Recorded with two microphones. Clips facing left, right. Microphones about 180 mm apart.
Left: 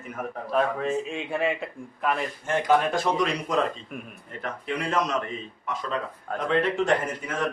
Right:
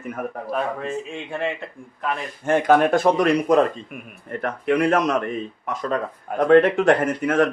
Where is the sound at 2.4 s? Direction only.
55° right (ahead or behind).